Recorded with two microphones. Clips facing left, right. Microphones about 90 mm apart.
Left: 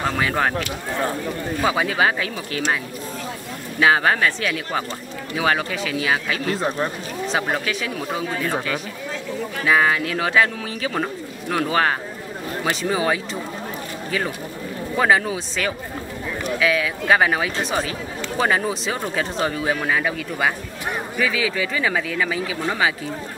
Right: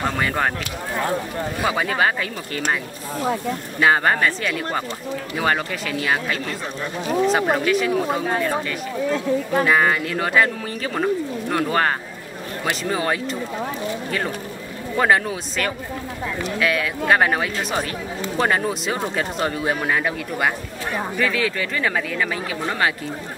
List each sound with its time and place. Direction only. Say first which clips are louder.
0.0 s speech: left 1 dB; centre (ahead or behind)
1.7 s speech: left 1 dB; 5° left (ahead or behind)
3.8 s speech: even; centre (ahead or behind)
9.1 s speech: right 7 dB; 50° right (ahead or behind)
9.7 s speech: left 4 dB; centre (ahead or behind)
15.0 s speech: even; centre (ahead or behind)